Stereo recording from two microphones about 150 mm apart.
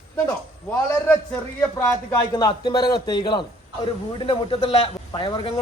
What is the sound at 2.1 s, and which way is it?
A man's voice, 25° left (ahead or behind).